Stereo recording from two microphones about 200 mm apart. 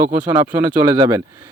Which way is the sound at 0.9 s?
20° right (ahead or behind).